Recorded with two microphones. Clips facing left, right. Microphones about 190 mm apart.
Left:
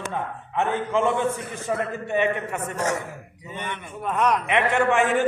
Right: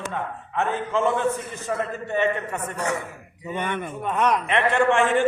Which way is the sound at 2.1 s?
10° left (ahead or behind).